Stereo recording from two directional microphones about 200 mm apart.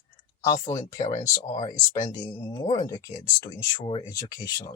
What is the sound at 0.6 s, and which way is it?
Speech, 35° left (ahead or behind).